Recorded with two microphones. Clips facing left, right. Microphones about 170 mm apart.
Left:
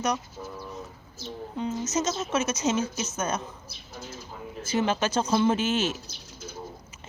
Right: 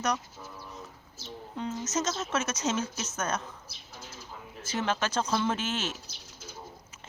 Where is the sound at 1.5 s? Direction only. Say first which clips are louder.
Left 3 dB; 5° left (ahead or behind).